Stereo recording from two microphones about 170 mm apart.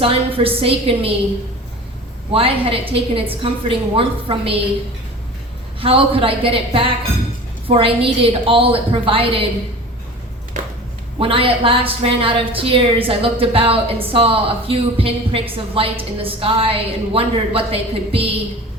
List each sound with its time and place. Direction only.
0.0 s a woman's voice: 35° right (ahead or behind)
2.3 s a woman's voice: 35° right (ahead or behind)
5.8 s a woman's voice: 35° right (ahead or behind)
10.5 s a sound: 45° right (ahead or behind)
11.2 s a woman's voice: 30° right (ahead or behind)